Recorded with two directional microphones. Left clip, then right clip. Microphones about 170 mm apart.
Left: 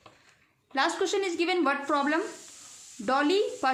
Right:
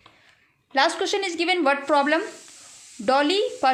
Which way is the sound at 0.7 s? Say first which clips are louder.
Right 6 dB; 40° right (ahead or behind).